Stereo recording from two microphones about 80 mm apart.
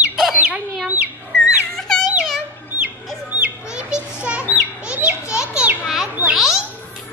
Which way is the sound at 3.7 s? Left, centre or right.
Centre.